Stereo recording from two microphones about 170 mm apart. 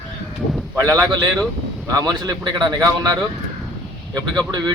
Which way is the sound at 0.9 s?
20° right (ahead or behind).